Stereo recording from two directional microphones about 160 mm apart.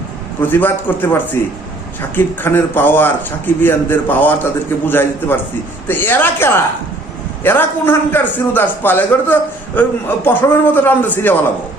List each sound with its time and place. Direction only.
0.4 s a man's voice: 10° left (ahead or behind)